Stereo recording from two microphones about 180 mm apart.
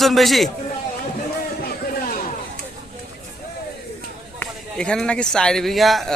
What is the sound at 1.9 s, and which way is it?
Chatter, 50° left (ahead or behind).